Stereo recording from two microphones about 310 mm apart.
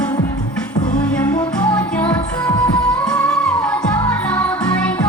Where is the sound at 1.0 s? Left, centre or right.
Centre.